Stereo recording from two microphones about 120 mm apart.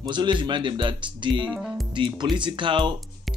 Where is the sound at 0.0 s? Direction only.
40° right (ahead or behind).